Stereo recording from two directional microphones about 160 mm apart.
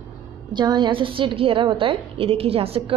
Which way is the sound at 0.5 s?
30° right (ahead or behind).